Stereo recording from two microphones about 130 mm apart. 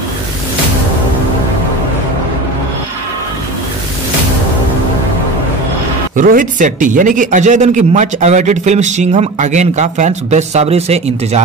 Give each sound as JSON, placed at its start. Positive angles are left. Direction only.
{"t": 6.1, "sound": "a man's voice", "side_deg": -85}